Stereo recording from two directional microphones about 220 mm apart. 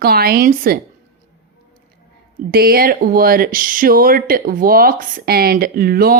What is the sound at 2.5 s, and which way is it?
Speech, 45° right (ahead or behind).